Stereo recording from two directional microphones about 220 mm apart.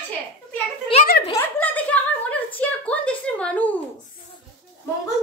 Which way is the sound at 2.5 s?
5° left (ahead or behind).